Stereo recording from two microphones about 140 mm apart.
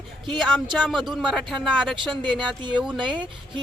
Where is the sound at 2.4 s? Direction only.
35° right (ahead or behind).